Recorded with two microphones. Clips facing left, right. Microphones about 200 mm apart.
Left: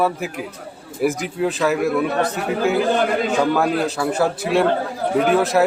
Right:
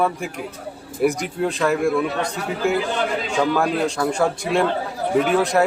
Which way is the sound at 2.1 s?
55° left (ahead or behind).